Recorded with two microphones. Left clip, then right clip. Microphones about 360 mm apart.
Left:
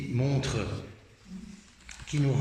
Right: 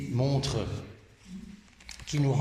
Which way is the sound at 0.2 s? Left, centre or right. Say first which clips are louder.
Right 1 dB; centre.